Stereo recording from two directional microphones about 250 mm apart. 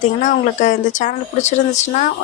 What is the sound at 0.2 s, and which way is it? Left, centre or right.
Speech, left.